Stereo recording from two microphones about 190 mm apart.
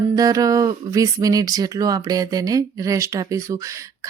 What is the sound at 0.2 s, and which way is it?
A woman's voice, 20° right (ahead or behind).